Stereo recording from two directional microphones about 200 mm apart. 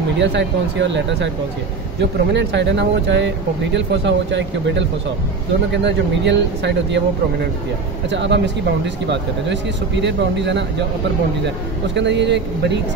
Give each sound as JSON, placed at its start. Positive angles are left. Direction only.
{"t": 0.2, "sound": "speech", "side_deg": -60}
{"t": 5.9, "sound": "speech", "side_deg": -60}
{"t": 8.1, "sound": "speech", "side_deg": -60}